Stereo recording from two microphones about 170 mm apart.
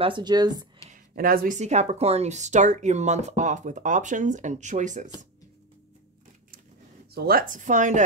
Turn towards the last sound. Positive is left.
turn(degrees=-45)  # may be behind; listen again after turning